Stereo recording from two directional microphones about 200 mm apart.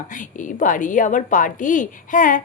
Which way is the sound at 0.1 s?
40° left (ahead or behind).